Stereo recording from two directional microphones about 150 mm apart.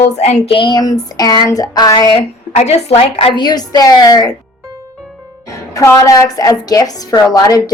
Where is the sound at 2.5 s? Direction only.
45° left (ahead or behind); by 4.3 s 25° left (ahead or behind).